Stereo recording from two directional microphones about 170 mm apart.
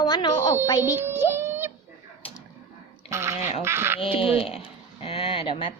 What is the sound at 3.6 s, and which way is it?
Speech, 15° right (ahead or behind).